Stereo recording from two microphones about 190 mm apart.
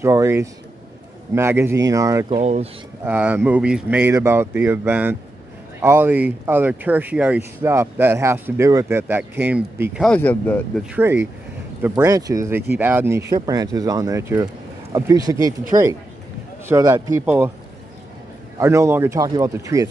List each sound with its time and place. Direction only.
0.0 s speech: 15° right (ahead or behind)
2.2 s speech: 35° right (ahead or behind)
3.1 s speech: 10° right (ahead or behind); by 10.6 s 10° left (ahead or behind)
10.8 s speech: 10° right (ahead or behind)
18.6 s speech: 15° right (ahead or behind)